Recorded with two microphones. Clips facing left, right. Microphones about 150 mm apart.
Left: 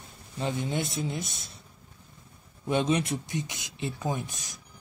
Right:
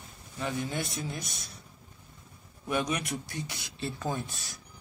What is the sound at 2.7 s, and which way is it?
Speech, 25° left (ahead or behind).